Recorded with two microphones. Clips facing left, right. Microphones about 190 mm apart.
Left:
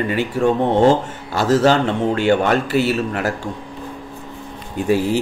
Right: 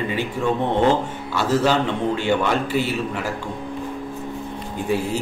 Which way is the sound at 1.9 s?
75° left (ahead or behind).